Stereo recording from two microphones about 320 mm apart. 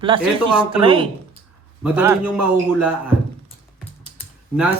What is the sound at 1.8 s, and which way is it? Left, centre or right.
A man's voice, centre.